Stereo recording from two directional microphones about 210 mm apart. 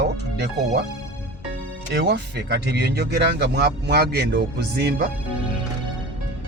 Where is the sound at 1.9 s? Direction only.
50° right (ahead or behind).